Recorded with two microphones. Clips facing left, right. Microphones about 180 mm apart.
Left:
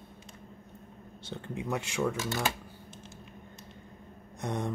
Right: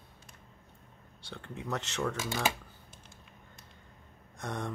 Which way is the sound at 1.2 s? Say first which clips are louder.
Left 4 dB; 20° left (ahead or behind).